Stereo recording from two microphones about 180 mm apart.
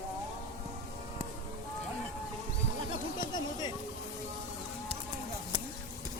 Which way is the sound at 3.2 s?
25° left (ahead or behind).